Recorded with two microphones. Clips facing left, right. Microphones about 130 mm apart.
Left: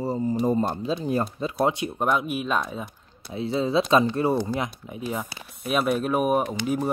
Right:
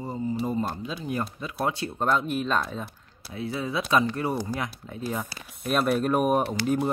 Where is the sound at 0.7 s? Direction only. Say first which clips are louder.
Left 6 dB; 25° left (ahead or behind).